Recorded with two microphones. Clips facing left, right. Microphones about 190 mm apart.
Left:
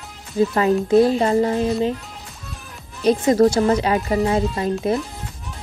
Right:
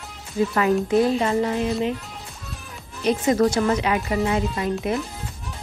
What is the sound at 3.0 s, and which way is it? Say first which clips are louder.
A woman's voice: left 4 dB; 35° left (ahead or behind).